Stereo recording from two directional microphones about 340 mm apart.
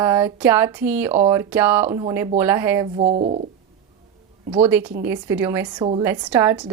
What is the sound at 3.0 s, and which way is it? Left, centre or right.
Speech, centre.